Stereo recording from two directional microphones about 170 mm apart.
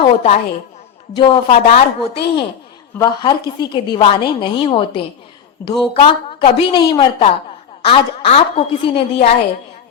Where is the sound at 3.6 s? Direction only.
25° left (ahead or behind).